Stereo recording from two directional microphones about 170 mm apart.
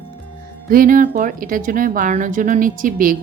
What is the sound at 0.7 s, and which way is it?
Speech, 55° right (ahead or behind).